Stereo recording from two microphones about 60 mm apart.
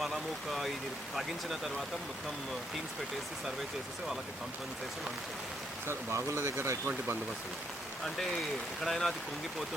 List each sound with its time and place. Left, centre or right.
0.0 s speech: centre
5.9 s speech: right
8.0 s speech: centre